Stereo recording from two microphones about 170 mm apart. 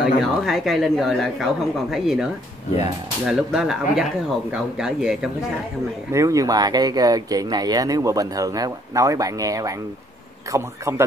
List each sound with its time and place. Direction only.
0.0 s speech: centre (ahead or behind)
3.3 s speech: 5° right (ahead or behind)
6.1 s a man's voice: 20° right (ahead or behind)